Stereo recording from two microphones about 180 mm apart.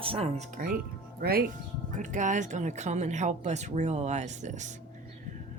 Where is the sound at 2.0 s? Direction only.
45° right (ahead or behind).